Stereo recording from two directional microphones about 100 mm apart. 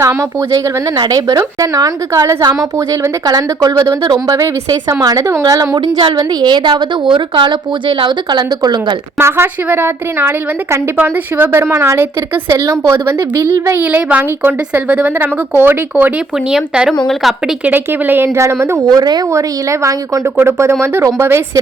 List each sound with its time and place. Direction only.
0.0 s a woman's voice: 30° right (ahead or behind)
0.9 s a woman's voice: 45° right (ahead or behind)
2.7 s a woman's voice: 30° right (ahead or behind)
3.2 s a woman's voice: 40° right (ahead or behind)
4.4 s a woman's voice: 30° right (ahead or behind)
5.8 s a woman's voice: 60° right (ahead or behind)
9.1 s a woman's voice: 25° right (ahead or behind)
12.5 s a woman's voice: 35° right (ahead or behind)
13.1 s a woman's voice: 25° right (ahead or behind); by 16.9 s 5° right (ahead or behind)
17.7 s a woman's voice: 20° right (ahead or behind)
18.9 s a woman's voice: 45° right (ahead or behind)
19.3 s a woman's voice: 30° right (ahead or behind)